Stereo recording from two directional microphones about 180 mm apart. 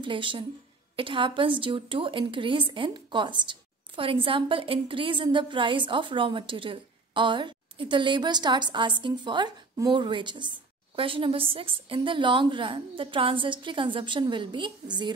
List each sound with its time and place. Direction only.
0.0 s a woman's voice: 30° right (ahead or behind)